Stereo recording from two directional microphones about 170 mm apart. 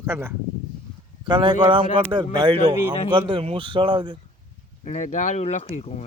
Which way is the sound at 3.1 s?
30° right (ahead or behind).